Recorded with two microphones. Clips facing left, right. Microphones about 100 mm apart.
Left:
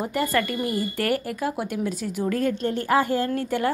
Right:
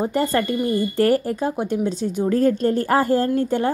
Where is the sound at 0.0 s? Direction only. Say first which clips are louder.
Right 4 dB; 30° right (ahead or behind).